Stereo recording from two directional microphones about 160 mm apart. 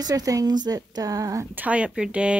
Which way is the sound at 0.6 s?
25° right (ahead or behind).